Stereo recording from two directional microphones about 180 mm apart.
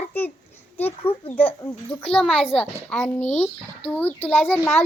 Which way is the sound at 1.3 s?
10° left (ahead or behind).